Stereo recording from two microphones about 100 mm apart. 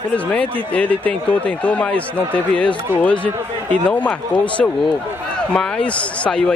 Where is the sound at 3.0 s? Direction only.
15° left (ahead or behind).